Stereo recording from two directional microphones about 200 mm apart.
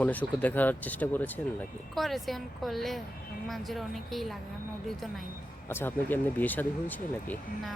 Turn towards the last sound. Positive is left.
turn(degrees=10)  # may be behind; listen again after turning